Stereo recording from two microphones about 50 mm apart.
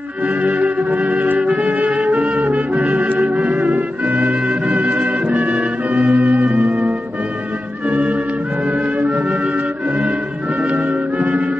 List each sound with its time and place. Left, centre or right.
0.3 s music: right
7.9 s music: right
10.6 s music: right